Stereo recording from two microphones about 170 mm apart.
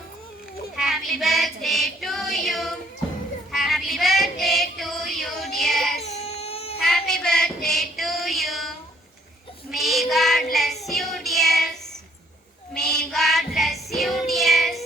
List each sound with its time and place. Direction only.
0.8 s child singing: centre (ahead or behind)
6.0 s baby cry: 40° left (ahead or behind)
6.7 s female singing: centre (ahead or behind)
9.6 s child singing: centre (ahead or behind)